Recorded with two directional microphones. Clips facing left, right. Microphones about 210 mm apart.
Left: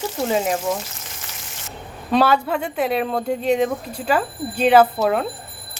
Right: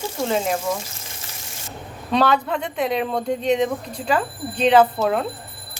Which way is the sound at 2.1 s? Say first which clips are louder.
Left 2 dB; 5° left (ahead or behind).